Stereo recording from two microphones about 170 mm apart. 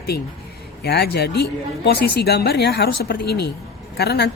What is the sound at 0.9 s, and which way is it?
A woman's voice, 70° left (ahead or behind).